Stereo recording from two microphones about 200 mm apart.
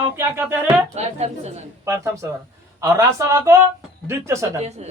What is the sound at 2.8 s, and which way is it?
Speech, 15° right (ahead or behind).